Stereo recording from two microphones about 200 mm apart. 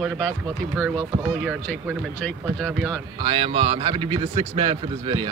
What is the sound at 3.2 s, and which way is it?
A man's voice, 25° right (ahead or behind).